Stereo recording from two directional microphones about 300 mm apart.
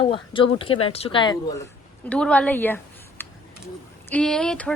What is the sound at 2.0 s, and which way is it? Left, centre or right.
A woman's voice, centre.